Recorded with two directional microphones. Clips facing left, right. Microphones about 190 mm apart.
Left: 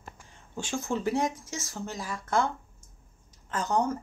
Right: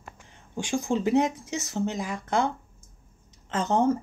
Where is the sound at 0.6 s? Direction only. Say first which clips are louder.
Right 5 dB; 15° right (ahead or behind).